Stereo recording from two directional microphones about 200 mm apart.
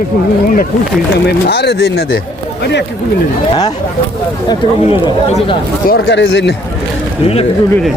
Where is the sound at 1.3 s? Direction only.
55° left (ahead or behind).